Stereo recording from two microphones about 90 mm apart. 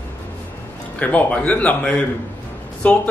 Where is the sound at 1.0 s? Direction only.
15° left (ahead or behind).